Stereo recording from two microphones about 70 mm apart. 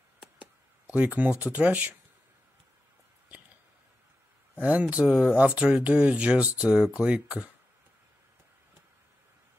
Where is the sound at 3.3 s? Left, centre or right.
Right.